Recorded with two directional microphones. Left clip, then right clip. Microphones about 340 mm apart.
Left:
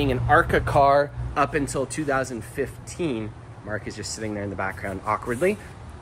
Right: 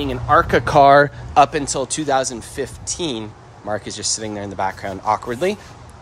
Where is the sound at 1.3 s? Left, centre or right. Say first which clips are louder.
Right 9 dB; centre.